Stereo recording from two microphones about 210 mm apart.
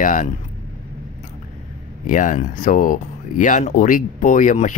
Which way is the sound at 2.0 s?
40° left (ahead or behind).